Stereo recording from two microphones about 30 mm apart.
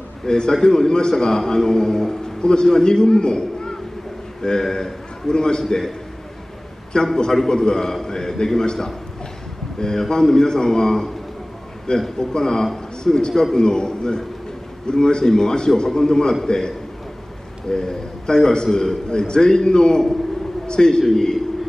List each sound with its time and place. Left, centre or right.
0.2 s a man's voice: centre
12.2 s a man's voice: left
21.0 s a man's voice: centre